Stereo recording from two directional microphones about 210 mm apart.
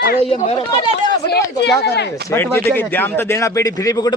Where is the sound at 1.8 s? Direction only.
50° left (ahead or behind).